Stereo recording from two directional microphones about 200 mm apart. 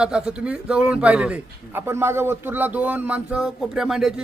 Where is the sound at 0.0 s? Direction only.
5° right (ahead or behind).